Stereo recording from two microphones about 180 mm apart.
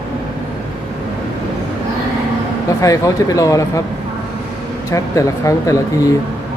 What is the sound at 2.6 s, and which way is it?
Speech, 20° left (ahead or behind).